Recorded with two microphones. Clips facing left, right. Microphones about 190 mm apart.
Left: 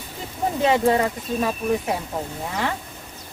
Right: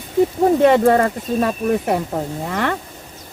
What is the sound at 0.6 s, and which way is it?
Speech, 55° right (ahead or behind).